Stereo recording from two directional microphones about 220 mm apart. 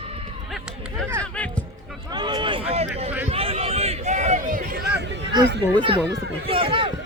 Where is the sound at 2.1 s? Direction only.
20° right (ahead or behind); by 5.2 s 50° right (ahead or behind).